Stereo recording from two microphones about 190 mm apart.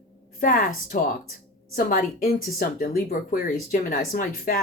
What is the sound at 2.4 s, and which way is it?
Speech, 50° left (ahead or behind).